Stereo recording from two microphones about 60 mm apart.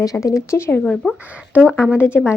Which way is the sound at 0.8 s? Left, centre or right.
Centre.